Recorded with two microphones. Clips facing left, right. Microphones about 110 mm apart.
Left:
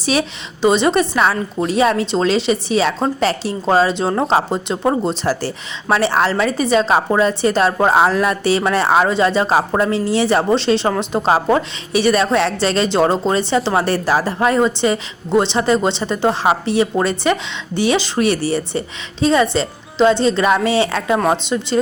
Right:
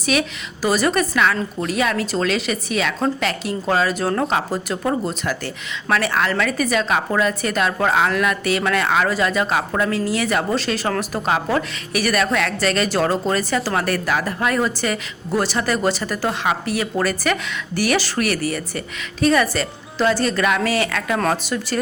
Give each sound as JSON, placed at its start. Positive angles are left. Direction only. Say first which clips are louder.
{"t": 0.0, "sound": "a woman's voice", "louder": "left 2 dB", "side_deg": 30}